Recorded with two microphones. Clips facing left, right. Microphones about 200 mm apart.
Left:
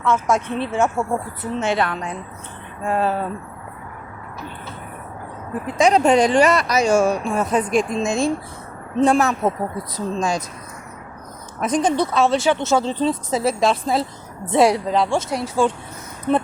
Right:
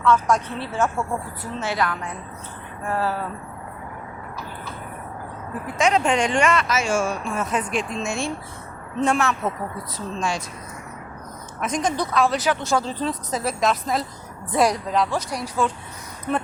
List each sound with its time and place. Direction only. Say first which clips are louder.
0.0 s speech: even; 25° left (ahead or behind)
5.6 s speech: left 5 dB; 35° left (ahead or behind)
11.6 s speech: left 5 dB; 35° left (ahead or behind)